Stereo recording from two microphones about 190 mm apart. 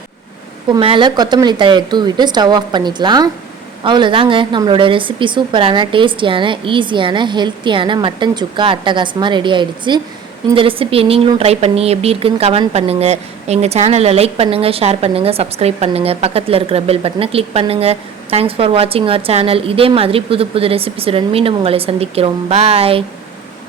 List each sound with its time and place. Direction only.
0.7 s a woman's voice: 25° right (ahead or behind)